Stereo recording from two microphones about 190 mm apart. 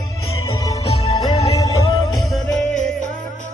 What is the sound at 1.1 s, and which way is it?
Music, 20° left (ahead or behind).